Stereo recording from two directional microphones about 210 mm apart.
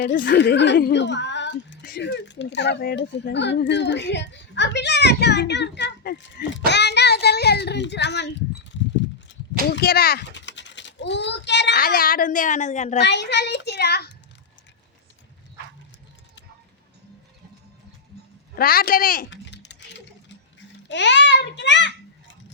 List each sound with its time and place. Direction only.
0.3 s a woman's voice: 55° left (ahead or behind)
9.3 s a sound: 60° left (ahead or behind)
9.6 s a child's voice: 50° left (ahead or behind)
13.0 s a child's voice: 55° left (ahead or behind)
18.5 s a child's voice: 45° left (ahead or behind)
19.3 s typing: 55° left (ahead or behind)
20.8 s a woman's voice: 55° left (ahead or behind)